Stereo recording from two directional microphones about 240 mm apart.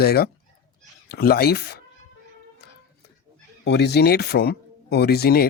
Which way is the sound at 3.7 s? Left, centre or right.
Left.